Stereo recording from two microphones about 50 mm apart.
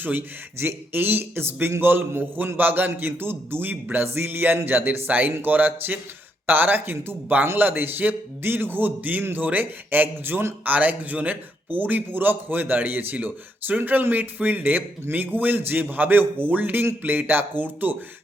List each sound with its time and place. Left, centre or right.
0.0 s a man's voice: right